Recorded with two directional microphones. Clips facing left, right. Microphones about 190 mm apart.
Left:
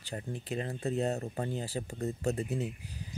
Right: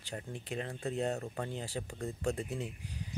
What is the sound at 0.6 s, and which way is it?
Speech, 25° left (ahead or behind).